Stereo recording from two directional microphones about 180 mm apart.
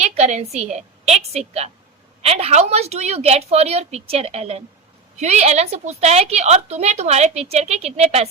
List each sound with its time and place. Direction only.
0.0 s a woman's voice: 40° right (ahead or behind)